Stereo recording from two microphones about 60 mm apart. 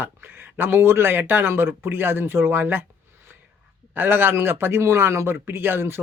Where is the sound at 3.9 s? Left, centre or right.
Right.